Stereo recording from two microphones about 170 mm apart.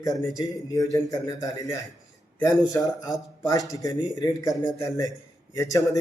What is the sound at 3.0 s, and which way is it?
A man's voice, 20° left (ahead or behind).